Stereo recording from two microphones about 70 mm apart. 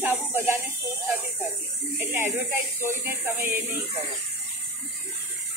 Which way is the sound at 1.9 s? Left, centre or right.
Right.